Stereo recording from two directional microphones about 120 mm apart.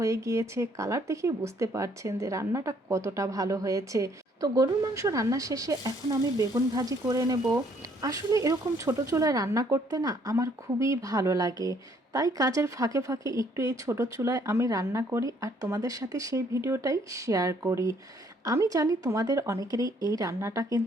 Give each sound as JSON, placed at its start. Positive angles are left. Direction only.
{"t": 0.0, "sound": "speech", "side_deg": -25}